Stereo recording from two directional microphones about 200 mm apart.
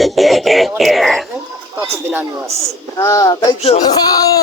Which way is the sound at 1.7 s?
10° right (ahead or behind).